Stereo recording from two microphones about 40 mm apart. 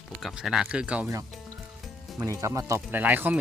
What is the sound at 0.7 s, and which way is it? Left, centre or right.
Speech, right.